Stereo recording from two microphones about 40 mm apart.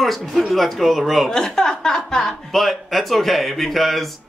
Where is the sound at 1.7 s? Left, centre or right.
Centre.